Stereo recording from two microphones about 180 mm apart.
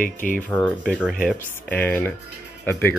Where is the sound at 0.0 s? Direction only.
50° left (ahead or behind).